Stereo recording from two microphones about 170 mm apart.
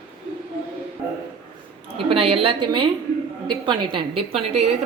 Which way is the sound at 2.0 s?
35° right (ahead or behind).